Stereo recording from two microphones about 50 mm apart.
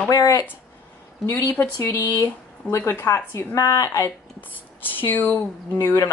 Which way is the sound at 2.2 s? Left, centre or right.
Left.